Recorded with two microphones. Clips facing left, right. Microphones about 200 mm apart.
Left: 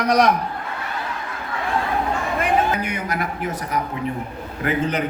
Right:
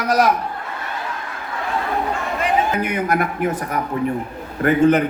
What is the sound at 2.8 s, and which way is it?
A man's voice, 55° right (ahead or behind).